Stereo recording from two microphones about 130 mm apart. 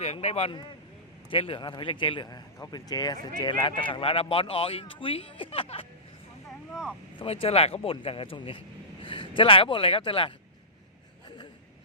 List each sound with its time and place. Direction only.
0.0 s speech: 55° left (ahead or behind)
1.3 s a man's voice: 40° left (ahead or behind)
7.2 s speech: 45° left (ahead or behind)